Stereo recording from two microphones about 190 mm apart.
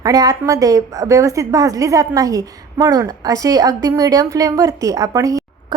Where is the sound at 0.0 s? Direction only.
20° right (ahead or behind).